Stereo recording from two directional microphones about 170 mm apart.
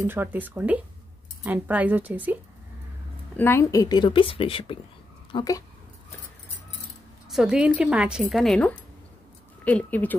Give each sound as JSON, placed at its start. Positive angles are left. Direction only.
{"t": 0.0, "sound": "speech", "side_deg": -15}
{"t": 3.3, "sound": "a woman's voice", "side_deg": 15}
{"t": 5.3, "sound": "speech", "side_deg": 20}
{"t": 7.2, "sound": "speech", "side_deg": -5}